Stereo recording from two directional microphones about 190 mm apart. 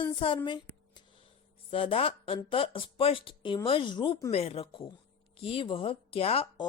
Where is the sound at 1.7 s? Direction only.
30° left (ahead or behind).